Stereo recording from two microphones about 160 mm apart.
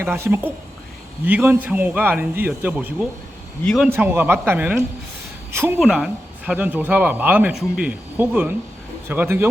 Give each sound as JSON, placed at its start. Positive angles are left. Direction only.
{"t": 0.0, "sound": "speech", "side_deg": -10}
{"t": 5.8, "sound": "speech", "side_deg": -5}